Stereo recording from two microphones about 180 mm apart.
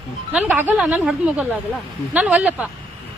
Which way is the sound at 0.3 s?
10° right (ahead or behind).